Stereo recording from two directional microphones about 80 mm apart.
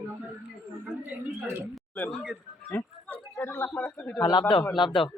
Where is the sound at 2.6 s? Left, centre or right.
Left.